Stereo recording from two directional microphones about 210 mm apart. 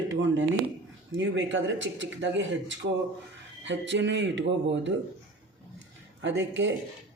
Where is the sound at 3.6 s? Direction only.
60° right (ahead or behind).